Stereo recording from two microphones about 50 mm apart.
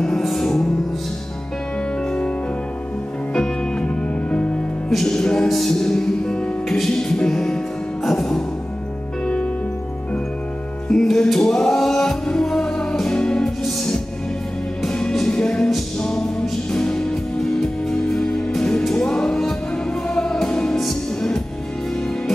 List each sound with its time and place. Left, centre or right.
0.0 s music: centre
3.3 s music: centre
4.9 s music: centre
10.9 s music: centre